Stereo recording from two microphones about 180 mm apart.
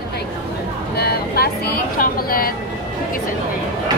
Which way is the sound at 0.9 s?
60° left (ahead or behind).